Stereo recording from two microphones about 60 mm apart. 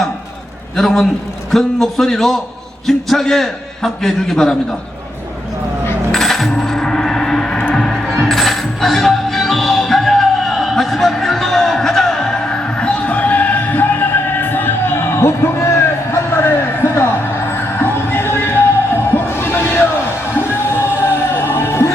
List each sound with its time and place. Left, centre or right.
0.8 s a man's voice: centre
6.1 s coin: centre
7.8 s music: centre; by 15.7 s left
16.1 s a sound: left
17.7 s music: left